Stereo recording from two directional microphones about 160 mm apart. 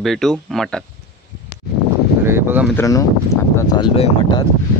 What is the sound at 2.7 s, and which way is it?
Speech, 20° left (ahead or behind).